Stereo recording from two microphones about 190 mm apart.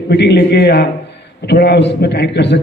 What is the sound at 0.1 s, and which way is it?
A man's voice, 60° left (ahead or behind).